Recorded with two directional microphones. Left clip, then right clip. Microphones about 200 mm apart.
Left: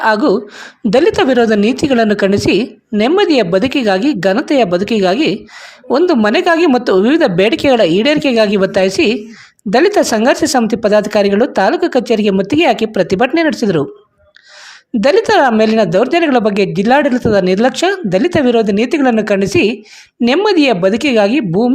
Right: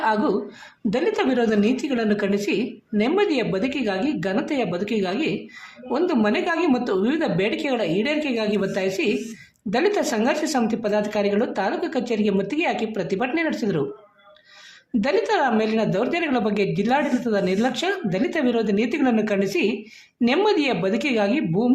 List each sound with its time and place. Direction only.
0.0 s a woman's voice: 45° left (ahead or behind)
15.0 s speech: 40° left (ahead or behind)